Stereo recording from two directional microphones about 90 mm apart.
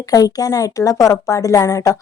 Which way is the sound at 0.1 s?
45° left (ahead or behind).